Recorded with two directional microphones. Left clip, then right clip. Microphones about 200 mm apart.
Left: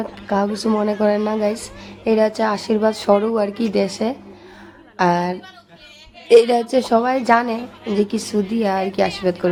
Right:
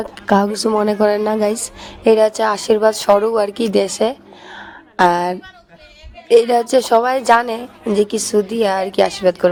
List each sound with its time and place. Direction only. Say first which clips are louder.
0.0 s a woman's voice: right 5 dB; 40° right (ahead or behind)
6.2 s a woman's voice: even; centre (ahead or behind)
6.7 s a woman's voice: right 4 dB; 35° right (ahead or behind)